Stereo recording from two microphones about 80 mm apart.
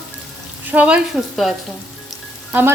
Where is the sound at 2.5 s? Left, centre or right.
Right.